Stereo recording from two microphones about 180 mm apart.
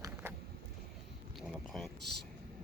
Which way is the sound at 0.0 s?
15° right (ahead or behind).